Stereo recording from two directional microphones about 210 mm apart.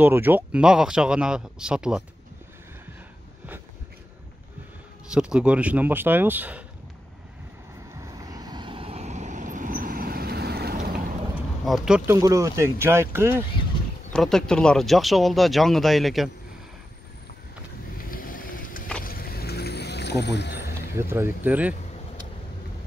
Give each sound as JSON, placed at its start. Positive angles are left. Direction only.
{"t": 0.0, "sound": "speech", "side_deg": -10}
{"t": 5.1, "sound": "speech", "side_deg": -5}
{"t": 8.0, "sound": "vehicle", "side_deg": -15}
{"t": 11.6, "sound": "speech", "side_deg": 0}
{"t": 12.2, "sound": "speech", "side_deg": -15}
{"t": 14.1, "sound": "speech", "side_deg": 5}
{"t": 17.9, "sound": "vehicle", "side_deg": 40}
{"t": 20.9, "sound": "speech", "side_deg": -10}